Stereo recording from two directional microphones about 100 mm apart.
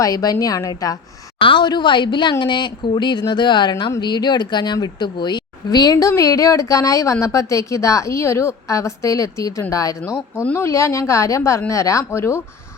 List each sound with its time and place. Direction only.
0.0 s a woman's voice: 40° left (ahead or behind)
1.4 s a woman's voice: 55° left (ahead or behind); by 12.4 s 25° left (ahead or behind)